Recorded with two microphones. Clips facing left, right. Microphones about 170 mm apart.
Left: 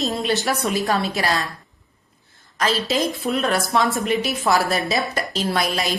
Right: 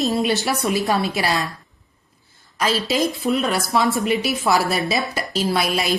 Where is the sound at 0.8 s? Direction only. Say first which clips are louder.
Right 1 dB; 15° right (ahead or behind).